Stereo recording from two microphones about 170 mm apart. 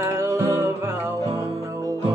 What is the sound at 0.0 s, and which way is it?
Music, 20° right (ahead or behind).